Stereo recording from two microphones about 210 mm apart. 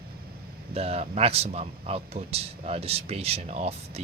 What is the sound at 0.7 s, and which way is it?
Speech, 30° right (ahead or behind).